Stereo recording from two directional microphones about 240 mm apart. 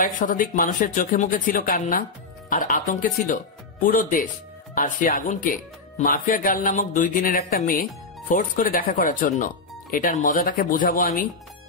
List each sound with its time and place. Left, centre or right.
0.2 s speech: left